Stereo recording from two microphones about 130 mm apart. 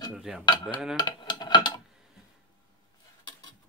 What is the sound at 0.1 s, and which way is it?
Cutlery, 5° right (ahead or behind).